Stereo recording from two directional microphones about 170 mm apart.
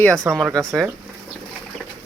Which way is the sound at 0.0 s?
5° left (ahead or behind).